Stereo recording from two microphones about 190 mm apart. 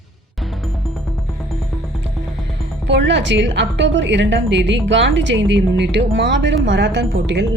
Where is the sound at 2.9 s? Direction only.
70° right (ahead or behind).